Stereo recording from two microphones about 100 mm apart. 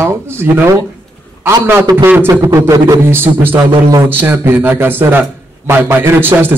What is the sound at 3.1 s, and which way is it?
A man's voice, 25° right (ahead or behind).